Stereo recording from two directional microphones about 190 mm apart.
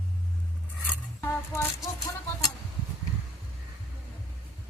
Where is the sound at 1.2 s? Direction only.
15° left (ahead or behind).